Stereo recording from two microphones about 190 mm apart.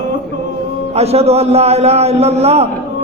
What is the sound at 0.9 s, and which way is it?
A man's voice, 35° right (ahead or behind).